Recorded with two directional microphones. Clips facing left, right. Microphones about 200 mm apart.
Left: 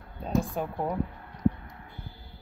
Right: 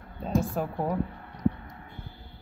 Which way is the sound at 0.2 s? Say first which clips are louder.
Right 1 dB; centre (ahead or behind).